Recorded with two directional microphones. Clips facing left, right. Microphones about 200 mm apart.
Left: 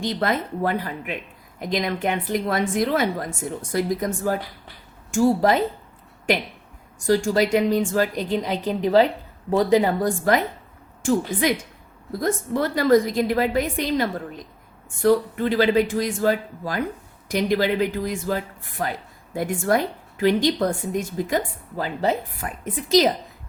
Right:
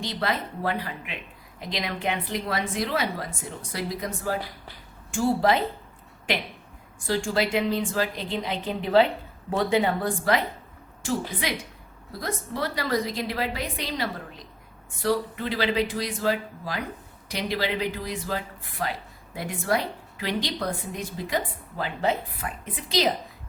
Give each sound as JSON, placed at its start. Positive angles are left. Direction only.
{"t": 0.0, "sound": "speech", "side_deg": 45}
{"t": 7.1, "sound": "speech", "side_deg": 40}